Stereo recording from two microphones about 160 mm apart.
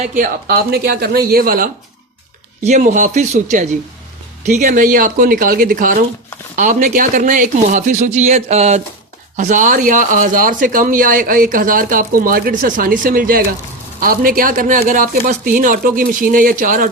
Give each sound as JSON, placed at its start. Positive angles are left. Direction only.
{"t": 0.2, "sound": "speech", "side_deg": -70}
{"t": 2.6, "sound": "speech", "side_deg": -50}